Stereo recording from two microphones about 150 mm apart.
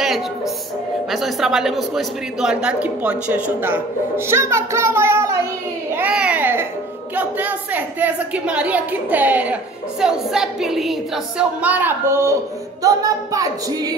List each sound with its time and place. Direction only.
1.1 s a woman's voice: centre (ahead or behind); by 12.4 s 15° right (ahead or behind)
12.8 s singing: 25° right (ahead or behind)